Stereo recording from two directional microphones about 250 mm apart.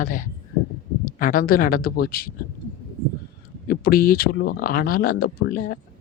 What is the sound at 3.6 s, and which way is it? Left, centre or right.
Speech, left.